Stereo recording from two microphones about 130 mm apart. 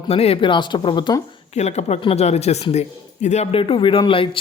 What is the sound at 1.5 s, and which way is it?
Speech, 60° left (ahead or behind).